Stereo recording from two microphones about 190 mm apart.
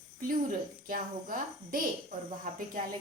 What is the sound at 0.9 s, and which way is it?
A woman's voice, 45° right (ahead or behind).